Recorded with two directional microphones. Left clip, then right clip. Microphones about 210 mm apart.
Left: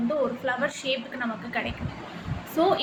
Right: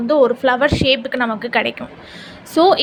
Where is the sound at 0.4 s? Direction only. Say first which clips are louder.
Right 13 dB; 50° right (ahead or behind).